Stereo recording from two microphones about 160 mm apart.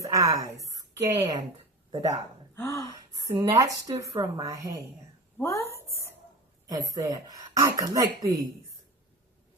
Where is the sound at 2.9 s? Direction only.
20° right (ahead or behind).